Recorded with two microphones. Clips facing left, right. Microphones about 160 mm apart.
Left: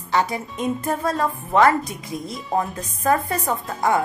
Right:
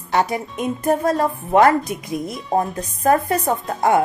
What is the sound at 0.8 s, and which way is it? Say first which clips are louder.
Speech: right 8 dB; 45° right (ahead or behind).